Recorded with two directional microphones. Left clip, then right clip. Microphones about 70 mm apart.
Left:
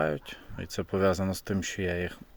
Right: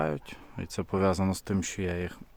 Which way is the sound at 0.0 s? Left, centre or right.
Right.